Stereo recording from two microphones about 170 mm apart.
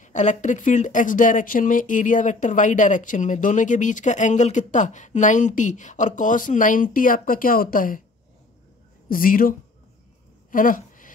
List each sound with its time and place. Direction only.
0.0 s speech: 45° left (ahead or behind)
9.1 s speech: 55° left (ahead or behind)
10.5 s a sound: 50° left (ahead or behind)